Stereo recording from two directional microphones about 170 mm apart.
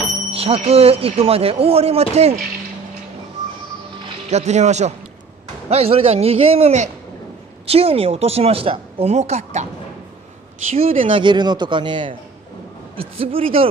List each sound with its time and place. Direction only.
0.3 s a woman's voice: 35° right (ahead or behind)
4.3 s a woman's voice: 40° right (ahead or behind)
10.7 s a woman's voice: 35° right (ahead or behind)